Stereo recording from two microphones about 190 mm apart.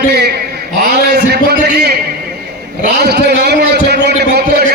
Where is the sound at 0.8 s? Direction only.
60° right (ahead or behind).